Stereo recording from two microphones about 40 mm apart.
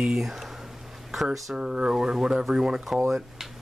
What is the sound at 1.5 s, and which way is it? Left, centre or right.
Speech, right.